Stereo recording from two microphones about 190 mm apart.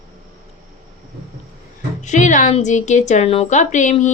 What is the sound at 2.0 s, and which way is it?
A woman's voice, 40° left (ahead or behind).